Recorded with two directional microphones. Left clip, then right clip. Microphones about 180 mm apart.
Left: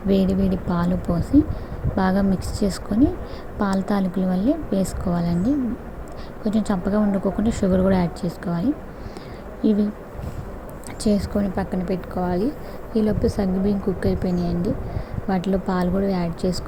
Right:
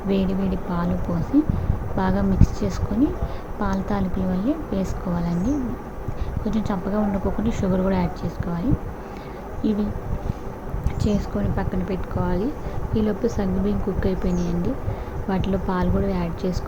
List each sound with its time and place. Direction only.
0.1 s a woman's voice: 30° left (ahead or behind)
11.0 s a woman's voice: 25° left (ahead or behind)